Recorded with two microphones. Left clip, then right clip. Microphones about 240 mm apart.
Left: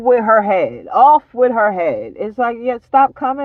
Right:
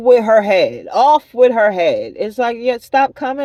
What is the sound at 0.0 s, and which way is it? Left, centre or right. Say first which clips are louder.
Speech: right 2 dB; right.